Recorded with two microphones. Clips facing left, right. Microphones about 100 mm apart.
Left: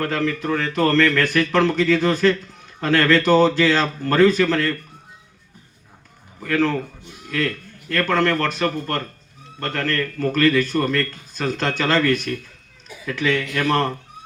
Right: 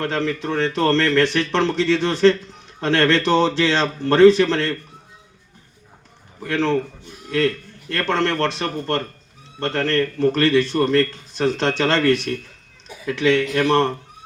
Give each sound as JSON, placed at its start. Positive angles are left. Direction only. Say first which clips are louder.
{"t": 0.0, "sound": "a man's voice", "louder": "even", "side_deg": -25}
{"t": 6.4, "sound": "a man's voice", "louder": "even", "side_deg": -25}